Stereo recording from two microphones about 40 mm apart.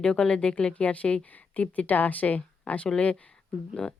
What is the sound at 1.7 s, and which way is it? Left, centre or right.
Speech, left.